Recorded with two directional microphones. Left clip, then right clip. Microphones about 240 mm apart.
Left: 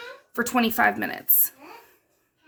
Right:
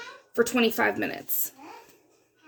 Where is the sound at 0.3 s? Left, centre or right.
Left.